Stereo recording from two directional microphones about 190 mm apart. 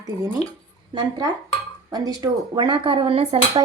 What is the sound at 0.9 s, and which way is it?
A woman's voice, 20° right (ahead or behind).